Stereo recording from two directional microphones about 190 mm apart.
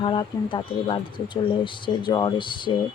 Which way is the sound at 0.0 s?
25° left (ahead or behind).